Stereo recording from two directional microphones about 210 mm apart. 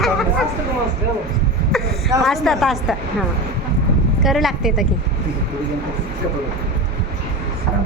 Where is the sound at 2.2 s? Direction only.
Centre (ahead or behind).